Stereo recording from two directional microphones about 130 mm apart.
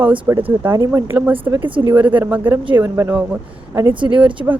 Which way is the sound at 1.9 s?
15° right (ahead or behind).